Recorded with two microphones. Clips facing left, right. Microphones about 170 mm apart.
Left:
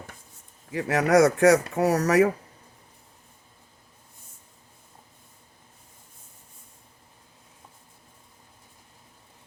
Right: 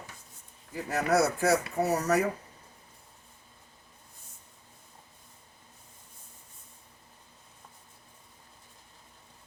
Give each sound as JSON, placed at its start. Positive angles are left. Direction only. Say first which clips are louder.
{"t": 0.7, "sound": "speech", "louder": "left 6 dB", "side_deg": 85}